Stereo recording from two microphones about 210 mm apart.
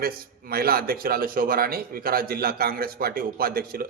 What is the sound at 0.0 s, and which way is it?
A man's voice, 45° right (ahead or behind).